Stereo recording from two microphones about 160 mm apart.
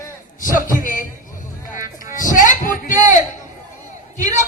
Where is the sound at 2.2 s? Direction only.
55° left (ahead or behind).